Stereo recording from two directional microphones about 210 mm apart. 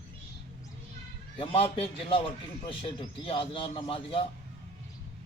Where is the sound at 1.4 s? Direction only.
25° left (ahead or behind).